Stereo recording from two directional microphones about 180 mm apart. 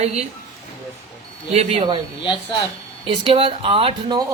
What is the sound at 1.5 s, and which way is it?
Speech, 30° right (ahead or behind).